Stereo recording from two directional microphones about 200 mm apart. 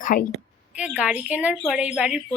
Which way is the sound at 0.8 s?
5° right (ahead or behind).